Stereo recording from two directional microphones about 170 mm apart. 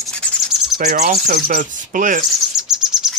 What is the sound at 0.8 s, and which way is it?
Speech, 45° right (ahead or behind).